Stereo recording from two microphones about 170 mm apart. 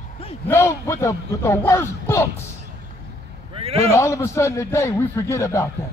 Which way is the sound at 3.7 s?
15° left (ahead or behind).